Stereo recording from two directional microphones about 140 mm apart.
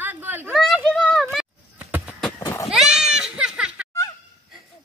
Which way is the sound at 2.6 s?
5° right (ahead or behind).